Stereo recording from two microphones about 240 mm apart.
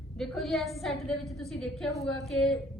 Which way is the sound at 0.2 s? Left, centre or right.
Centre.